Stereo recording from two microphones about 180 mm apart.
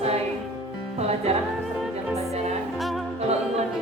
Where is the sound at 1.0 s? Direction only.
35° right (ahead or behind).